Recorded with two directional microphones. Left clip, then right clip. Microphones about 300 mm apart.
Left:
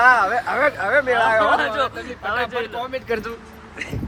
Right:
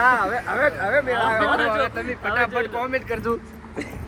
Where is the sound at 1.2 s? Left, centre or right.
Centre.